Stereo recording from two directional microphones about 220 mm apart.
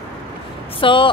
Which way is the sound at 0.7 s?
20° left (ahead or behind).